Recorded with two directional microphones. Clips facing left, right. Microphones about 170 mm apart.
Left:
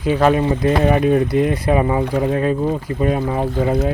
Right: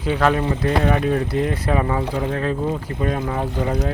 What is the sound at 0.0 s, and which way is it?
Speech, 15° left (ahead or behind).